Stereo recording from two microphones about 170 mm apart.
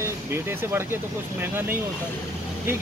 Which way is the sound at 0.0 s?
15° right (ahead or behind).